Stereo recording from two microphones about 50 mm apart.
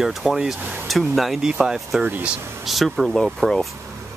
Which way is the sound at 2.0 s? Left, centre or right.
Right.